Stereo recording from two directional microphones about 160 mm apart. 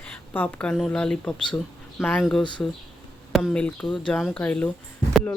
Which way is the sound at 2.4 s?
30° left (ahead or behind).